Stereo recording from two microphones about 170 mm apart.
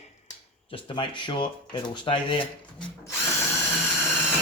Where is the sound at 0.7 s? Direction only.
30° left (ahead or behind).